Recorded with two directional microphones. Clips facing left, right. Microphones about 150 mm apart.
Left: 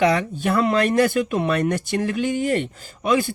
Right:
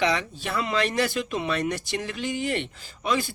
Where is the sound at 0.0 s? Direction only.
50° left (ahead or behind).